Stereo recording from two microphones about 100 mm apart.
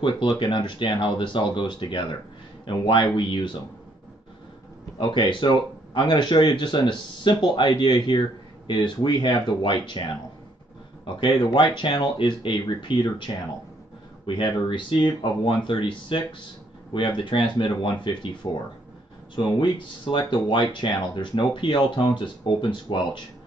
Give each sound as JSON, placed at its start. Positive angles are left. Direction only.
{"t": 0.4, "sound": "speech", "side_deg": 55}
{"t": 4.9, "sound": "speech", "side_deg": 55}
{"t": 11.1, "sound": "speech", "side_deg": 55}